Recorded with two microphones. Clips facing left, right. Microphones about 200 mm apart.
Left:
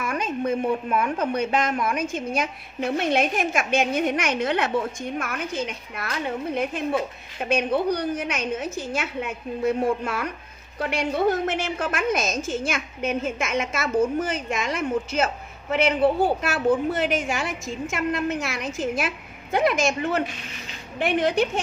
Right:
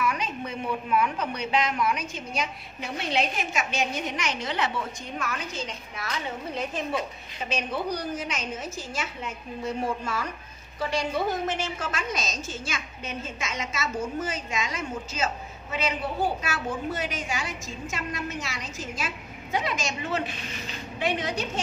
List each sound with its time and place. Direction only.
0.0 s a woman's voice: 50° left (ahead or behind)